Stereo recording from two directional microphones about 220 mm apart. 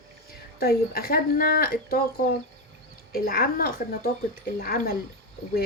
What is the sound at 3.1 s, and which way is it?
A woman's voice, 40° left (ahead or behind).